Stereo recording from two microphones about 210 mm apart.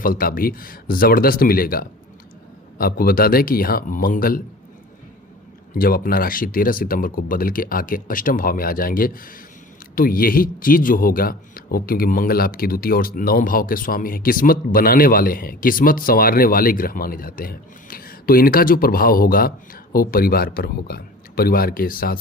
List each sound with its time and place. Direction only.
0.0 s a man's voice: 45° left (ahead or behind)
5.7 s a man's voice: 45° left (ahead or behind)